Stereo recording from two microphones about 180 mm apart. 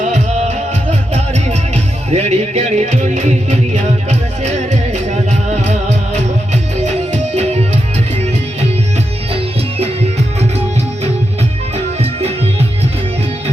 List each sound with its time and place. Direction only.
0.0 s music: 40° right (ahead or behind)
5.5 s music: 40° right (ahead or behind)
9.3 s music: 35° right (ahead or behind)